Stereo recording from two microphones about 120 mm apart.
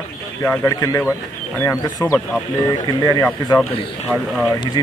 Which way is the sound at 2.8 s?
35° left (ahead or behind).